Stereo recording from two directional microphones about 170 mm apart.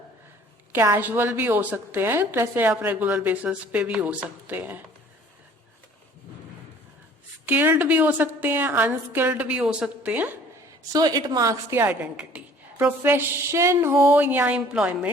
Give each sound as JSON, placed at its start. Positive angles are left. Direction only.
{"t": 0.7, "sound": "a woman's voice", "side_deg": -15}
{"t": 7.4, "sound": "a woman's voice", "side_deg": -10}
{"t": 10.9, "sound": "a woman's voice", "side_deg": -25}